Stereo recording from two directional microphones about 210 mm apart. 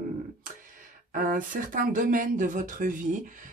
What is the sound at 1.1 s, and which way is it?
Speech, 40° right (ahead or behind).